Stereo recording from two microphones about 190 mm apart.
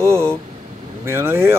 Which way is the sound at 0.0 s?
15° right (ahead or behind).